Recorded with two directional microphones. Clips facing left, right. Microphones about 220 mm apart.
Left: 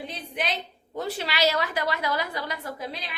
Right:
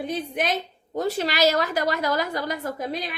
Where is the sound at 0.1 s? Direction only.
45° right (ahead or behind).